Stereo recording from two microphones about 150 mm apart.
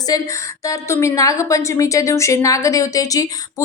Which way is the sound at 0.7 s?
20° left (ahead or behind).